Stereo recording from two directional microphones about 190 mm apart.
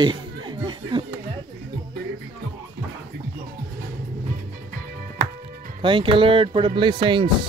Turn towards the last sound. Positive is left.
turn(degrees=-25)  # may be behind; listen again after turning